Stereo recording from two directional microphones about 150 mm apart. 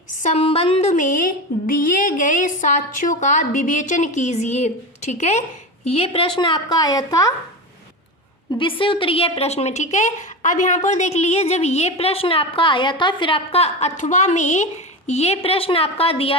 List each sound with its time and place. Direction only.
0.2 s speech: 45° left (ahead or behind); by 7.3 s 25° left (ahead or behind)
8.5 s a woman's voice: 35° left (ahead or behind)